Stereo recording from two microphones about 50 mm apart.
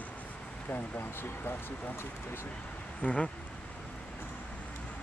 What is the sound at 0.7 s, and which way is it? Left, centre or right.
Speech, left.